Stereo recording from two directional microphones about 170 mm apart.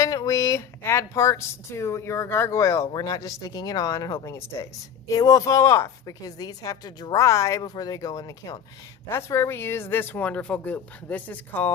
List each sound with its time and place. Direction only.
0.0 s speech: 20° left (ahead or behind)